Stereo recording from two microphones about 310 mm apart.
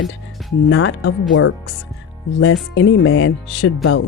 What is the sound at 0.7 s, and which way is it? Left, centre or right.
Speech, left.